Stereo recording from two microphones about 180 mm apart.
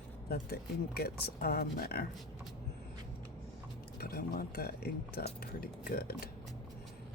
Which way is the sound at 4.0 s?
55° left (ahead or behind).